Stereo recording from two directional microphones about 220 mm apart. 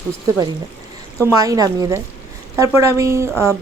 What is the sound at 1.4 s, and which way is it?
Speech, 15° right (ahead or behind).